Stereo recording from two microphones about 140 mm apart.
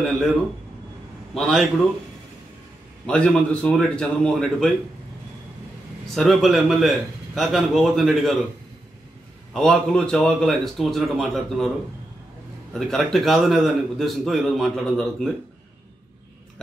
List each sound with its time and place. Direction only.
1.3 s a man's voice: 5° left (ahead or behind)
3.1 s a man's voice: 5° left (ahead or behind)
6.0 s a man's voice: centre (ahead or behind)
9.5 s a man's voice: 5° left (ahead or behind)
12.7 s a man's voice: centre (ahead or behind)